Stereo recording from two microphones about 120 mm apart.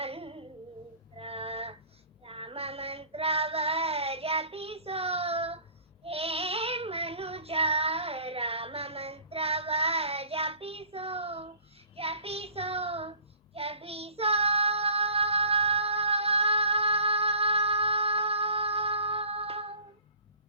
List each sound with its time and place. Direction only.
0.0 s humming: 55° right (ahead or behind)
1.1 s female singing: 55° right (ahead or behind)
2.2 s child singing: 50° right (ahead or behind)